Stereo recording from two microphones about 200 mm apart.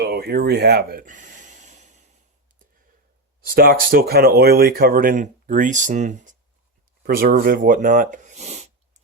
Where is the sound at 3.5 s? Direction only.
45° right (ahead or behind).